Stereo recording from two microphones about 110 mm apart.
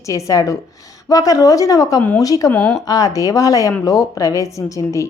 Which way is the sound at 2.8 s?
35° left (ahead or behind).